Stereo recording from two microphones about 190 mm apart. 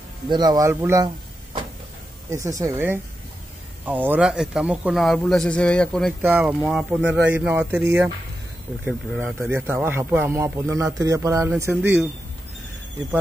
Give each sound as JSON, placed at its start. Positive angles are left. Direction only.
{"t": 0.3, "sound": "a man's voice", "side_deg": -20}
{"t": 6.2, "sound": "speech", "side_deg": -10}
{"t": 9.5, "sound": "speech", "side_deg": -10}